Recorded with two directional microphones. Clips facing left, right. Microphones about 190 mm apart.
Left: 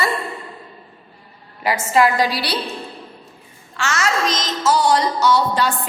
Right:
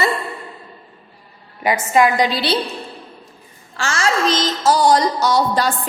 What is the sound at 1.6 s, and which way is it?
Speech, 20° right (ahead or behind).